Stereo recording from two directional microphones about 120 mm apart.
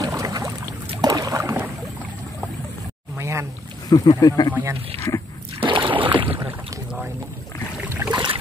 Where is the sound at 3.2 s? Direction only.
25° right (ahead or behind).